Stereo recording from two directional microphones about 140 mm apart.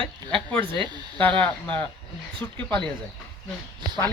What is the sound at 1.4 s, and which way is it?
Speech, 10° left (ahead or behind).